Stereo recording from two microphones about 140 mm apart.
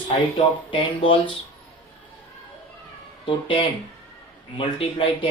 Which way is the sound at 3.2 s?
40° left (ahead or behind).